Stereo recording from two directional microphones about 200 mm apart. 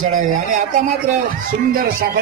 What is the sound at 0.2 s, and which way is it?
Speech, 40° right (ahead or behind).